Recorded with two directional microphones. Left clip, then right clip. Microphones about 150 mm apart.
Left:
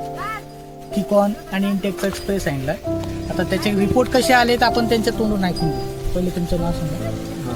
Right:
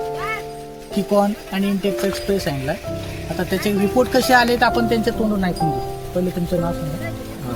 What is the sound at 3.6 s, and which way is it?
Speech, 20° left (ahead or behind).